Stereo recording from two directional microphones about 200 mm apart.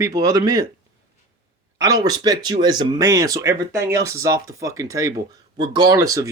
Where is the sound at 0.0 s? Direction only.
20° right (ahead or behind).